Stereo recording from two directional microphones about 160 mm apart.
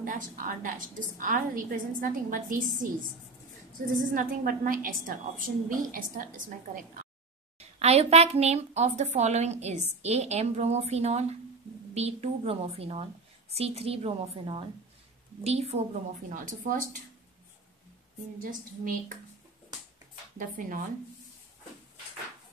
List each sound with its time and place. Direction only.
0.0 s a woman's voice: 60° right (ahead or behind)
4.0 s a woman's voice: 55° right (ahead or behind)
7.5 s a woman's voice: 40° right (ahead or behind)
16.3 s a woman's voice: 55° right (ahead or behind)
18.5 s a woman's voice: 55° right (ahead or behind)
20.3 s a woman's voice: 60° right (ahead or behind)